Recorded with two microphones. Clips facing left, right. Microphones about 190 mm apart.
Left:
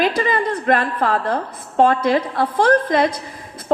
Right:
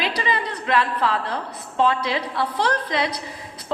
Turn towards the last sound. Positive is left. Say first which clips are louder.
# left 8 dB
turn(degrees=50)  # may be behind; listen again after turning